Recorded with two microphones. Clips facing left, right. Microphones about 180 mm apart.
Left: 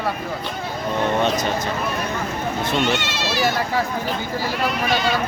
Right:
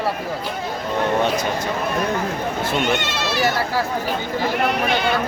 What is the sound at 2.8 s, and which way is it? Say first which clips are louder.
Goat: right 1 dB; 55° right (ahead or behind).